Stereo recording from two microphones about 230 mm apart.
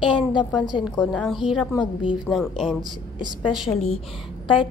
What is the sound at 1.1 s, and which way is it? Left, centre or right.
A woman's voice, centre.